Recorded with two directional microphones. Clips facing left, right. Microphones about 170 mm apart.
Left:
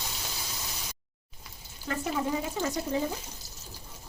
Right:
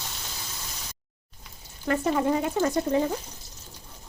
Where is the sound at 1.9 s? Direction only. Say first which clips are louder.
Right 6 dB; 60° right (ahead or behind).